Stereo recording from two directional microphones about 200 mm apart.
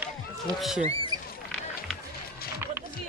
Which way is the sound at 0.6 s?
Centre (ahead or behind).